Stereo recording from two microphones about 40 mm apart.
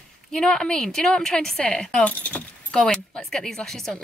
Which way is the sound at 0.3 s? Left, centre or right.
Centre.